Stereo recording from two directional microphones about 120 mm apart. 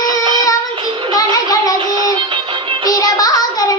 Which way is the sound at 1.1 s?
30° left (ahead or behind).